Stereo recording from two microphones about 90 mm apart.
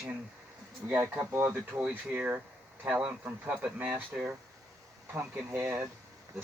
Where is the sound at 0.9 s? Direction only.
20° right (ahead or behind).